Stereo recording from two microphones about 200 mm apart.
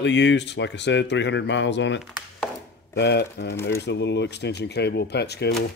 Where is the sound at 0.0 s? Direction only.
60° left (ahead or behind).